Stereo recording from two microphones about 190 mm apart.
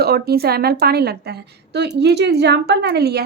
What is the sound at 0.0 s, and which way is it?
Speech, 55° right (ahead or behind).